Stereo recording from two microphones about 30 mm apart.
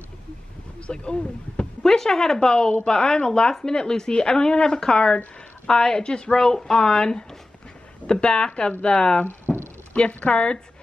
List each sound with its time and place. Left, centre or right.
0.9 s speech: left
1.9 s speech: centre
2.4 s speech: left
6.4 s speech: left
9.5 s a sound: left
9.9 s speech: left